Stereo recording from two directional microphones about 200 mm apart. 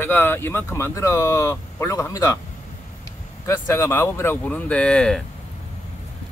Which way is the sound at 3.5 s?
15° left (ahead or behind).